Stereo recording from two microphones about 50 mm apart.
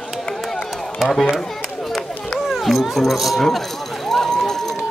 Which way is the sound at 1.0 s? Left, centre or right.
Centre.